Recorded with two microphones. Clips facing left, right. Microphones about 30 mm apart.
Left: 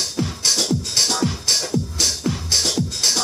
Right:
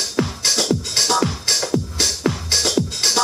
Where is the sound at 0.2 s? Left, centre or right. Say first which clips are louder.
Right 2 dB; centre.